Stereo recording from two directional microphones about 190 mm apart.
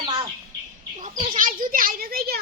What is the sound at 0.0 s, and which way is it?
Bird, 25° right (ahead or behind).